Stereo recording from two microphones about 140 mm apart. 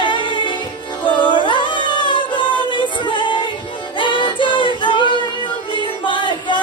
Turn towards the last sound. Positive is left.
turn(degrees=35)  # may be behind; listen again after turning